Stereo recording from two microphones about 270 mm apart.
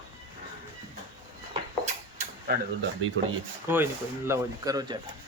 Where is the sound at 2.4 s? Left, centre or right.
Right.